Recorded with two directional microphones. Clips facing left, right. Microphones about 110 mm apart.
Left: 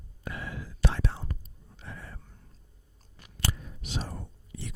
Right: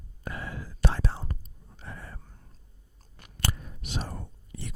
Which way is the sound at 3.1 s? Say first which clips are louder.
Right 1 dB; 50° right (ahead or behind).